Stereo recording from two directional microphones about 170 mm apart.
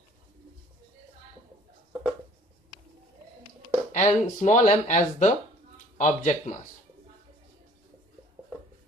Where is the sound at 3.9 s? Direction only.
45° left (ahead or behind).